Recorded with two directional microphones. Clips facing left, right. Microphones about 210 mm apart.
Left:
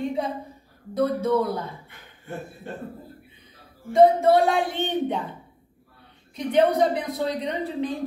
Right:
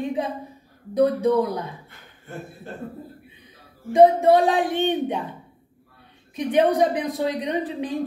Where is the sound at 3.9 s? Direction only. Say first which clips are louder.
Right 2 dB; 15° right (ahead or behind).